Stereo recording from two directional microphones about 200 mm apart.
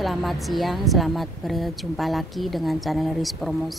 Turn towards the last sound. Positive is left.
turn(degrees=0)  # may be behind; listen again after turning